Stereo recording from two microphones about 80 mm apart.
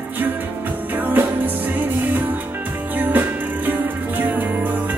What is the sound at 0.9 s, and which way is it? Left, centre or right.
Music, right.